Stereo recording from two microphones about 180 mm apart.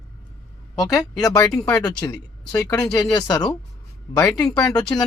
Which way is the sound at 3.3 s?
20° left (ahead or behind).